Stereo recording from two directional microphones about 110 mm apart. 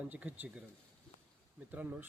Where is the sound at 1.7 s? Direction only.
15° right (ahead or behind).